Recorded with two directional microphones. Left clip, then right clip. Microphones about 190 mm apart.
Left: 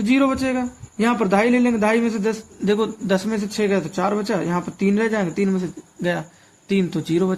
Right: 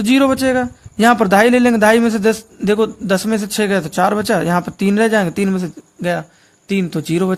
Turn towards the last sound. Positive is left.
turn(degrees=-45)  # may be behind; listen again after turning